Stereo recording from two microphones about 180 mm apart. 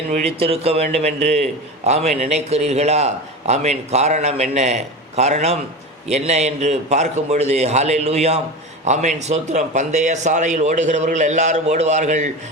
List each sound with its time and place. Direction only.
0.4 s a man's voice: 35° right (ahead or behind)